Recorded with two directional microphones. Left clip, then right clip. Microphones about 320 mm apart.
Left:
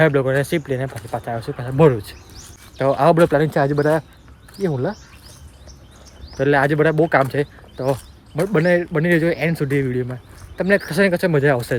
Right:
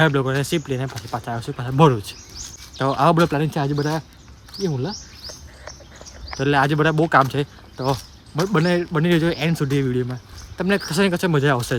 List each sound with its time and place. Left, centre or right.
0.0 s speech: centre
6.3 s speech: centre